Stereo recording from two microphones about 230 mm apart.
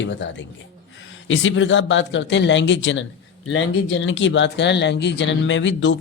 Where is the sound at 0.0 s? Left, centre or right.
Left.